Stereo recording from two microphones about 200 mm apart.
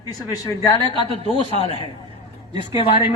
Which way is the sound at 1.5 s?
30° left (ahead or behind).